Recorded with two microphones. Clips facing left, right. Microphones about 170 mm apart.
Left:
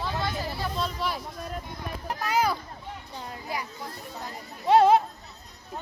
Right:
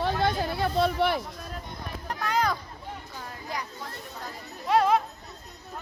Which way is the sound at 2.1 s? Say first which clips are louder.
Left 1 dB; 10° left (ahead or behind).